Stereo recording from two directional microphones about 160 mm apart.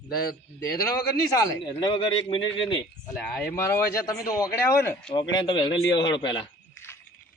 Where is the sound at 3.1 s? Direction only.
5° left (ahead or behind); by 6.4 s 30° left (ahead or behind).